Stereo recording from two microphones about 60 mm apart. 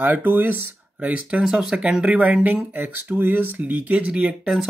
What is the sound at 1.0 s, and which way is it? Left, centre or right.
Speech, right.